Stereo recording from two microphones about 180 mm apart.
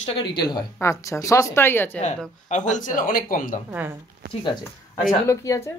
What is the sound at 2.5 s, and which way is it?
Speech, 45° left (ahead or behind).